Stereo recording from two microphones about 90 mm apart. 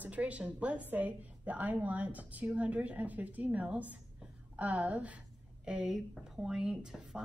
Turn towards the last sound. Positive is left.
turn(degrees=-10)  # may be behind; listen again after turning